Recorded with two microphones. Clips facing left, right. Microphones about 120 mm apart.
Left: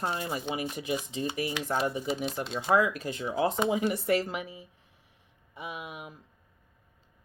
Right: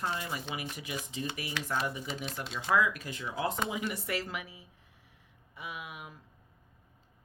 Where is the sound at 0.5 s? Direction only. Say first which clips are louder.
Left 7 dB; 30° left (ahead or behind).